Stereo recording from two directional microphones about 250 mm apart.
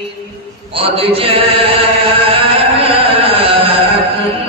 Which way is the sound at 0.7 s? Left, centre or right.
Right.